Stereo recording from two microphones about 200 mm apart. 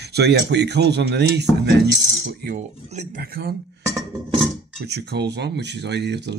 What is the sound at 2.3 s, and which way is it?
Speech, 45° right (ahead or behind).